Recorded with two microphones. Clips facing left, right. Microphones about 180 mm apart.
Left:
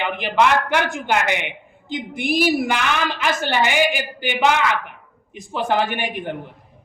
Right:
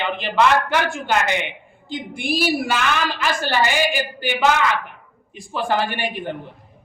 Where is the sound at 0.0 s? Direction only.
15° left (ahead or behind).